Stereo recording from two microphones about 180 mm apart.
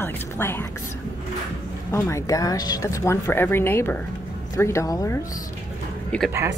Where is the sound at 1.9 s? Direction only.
15° left (ahead or behind).